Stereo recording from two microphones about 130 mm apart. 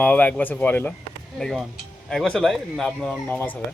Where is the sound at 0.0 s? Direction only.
10° left (ahead or behind).